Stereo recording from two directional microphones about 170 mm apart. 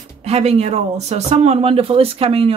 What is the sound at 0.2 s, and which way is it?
Speech, 40° right (ahead or behind).